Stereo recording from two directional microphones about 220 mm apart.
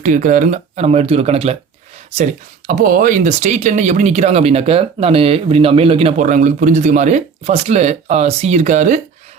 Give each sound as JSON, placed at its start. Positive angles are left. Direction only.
{"t": 0.0, "sound": "speech", "side_deg": -35}
{"t": 2.6, "sound": "speech", "side_deg": -40}